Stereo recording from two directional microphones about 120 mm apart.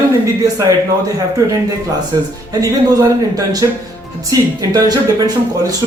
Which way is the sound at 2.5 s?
30° right (ahead or behind).